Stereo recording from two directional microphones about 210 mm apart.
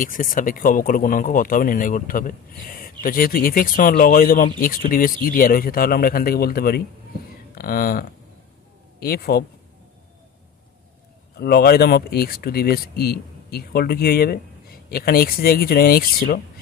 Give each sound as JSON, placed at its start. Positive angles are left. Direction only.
{"t": 0.0, "sound": "speech", "side_deg": 40}
{"t": 11.3, "sound": "speech", "side_deg": 50}